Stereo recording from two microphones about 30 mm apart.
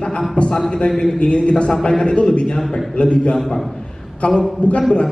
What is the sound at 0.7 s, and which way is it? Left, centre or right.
Speech, left.